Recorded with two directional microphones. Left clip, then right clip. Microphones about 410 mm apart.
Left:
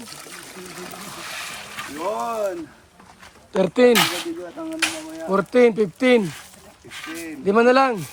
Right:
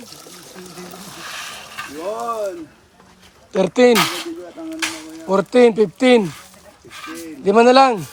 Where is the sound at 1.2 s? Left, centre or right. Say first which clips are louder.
Right 2 dB; centre.